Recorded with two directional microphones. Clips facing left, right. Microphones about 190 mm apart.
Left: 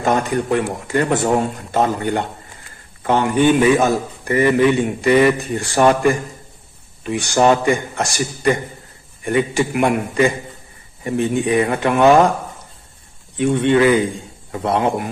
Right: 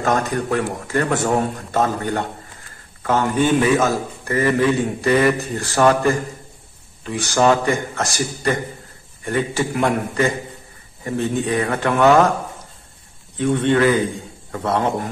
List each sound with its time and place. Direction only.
0.0 s a man's voice: 15° left (ahead or behind)
3.0 s a sound: 15° left (ahead or behind)
3.7 s a man's voice: 15° left (ahead or behind)
13.4 s a man's voice: 15° left (ahead or behind)